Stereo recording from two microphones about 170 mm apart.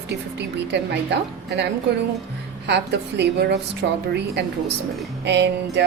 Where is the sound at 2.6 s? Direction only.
80° right.